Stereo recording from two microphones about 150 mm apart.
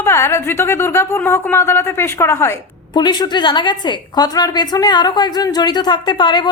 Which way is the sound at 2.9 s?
30° left (ahead or behind).